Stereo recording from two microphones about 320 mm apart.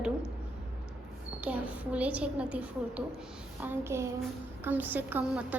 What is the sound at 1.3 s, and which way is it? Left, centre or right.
A woman's voice, centre.